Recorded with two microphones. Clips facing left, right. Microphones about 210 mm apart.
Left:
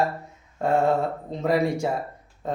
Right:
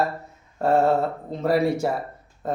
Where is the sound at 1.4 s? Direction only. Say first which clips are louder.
Right 2 dB; 15° left (ahead or behind).